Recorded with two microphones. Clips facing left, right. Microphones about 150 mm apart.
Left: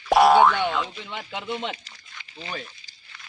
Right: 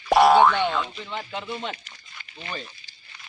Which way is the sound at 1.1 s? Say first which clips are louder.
Even; 15° left (ahead or behind).